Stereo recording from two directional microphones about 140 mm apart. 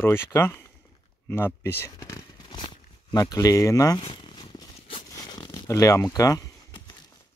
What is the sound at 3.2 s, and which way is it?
Speech, 25° left (ahead or behind).